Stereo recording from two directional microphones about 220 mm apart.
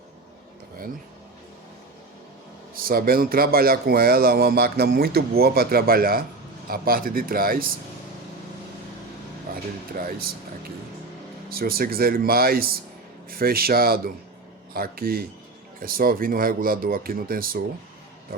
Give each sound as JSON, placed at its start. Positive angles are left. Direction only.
{"t": 2.8, "sound": "a man's voice", "side_deg": -40}
{"t": 10.0, "sound": "a man's voice", "side_deg": -40}